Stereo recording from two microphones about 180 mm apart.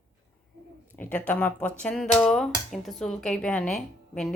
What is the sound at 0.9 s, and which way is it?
Speech, 10° left (ahead or behind).